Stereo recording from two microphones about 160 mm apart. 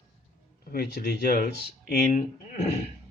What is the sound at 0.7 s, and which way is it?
Speech, 85° left.